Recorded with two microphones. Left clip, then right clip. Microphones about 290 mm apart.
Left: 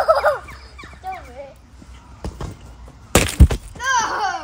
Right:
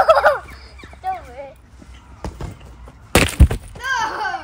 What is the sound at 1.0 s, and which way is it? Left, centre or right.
Dog, centre.